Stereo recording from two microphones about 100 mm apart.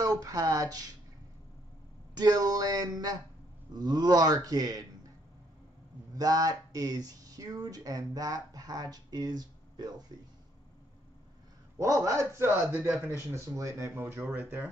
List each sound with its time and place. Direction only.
0.0 s a sound: 40° right (ahead or behind)
2.1 s speech: 40° right (ahead or behind)
6.1 s speech: 40° right (ahead or behind)
11.8 s speech: 30° right (ahead or behind)
13.3 s speech: 30° right (ahead or behind)